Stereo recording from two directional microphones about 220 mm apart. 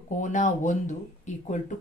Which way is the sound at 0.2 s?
35° left (ahead or behind).